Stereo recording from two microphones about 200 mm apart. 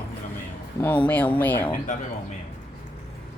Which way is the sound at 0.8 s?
10° left (ahead or behind).